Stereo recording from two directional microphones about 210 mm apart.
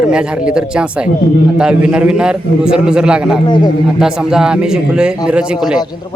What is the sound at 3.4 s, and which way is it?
Speech, 20° left (ahead or behind).